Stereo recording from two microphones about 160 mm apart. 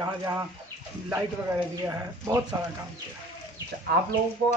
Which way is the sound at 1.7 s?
20° right (ahead or behind).